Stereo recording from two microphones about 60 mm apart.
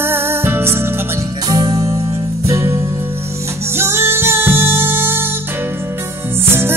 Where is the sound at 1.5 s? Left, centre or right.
Right.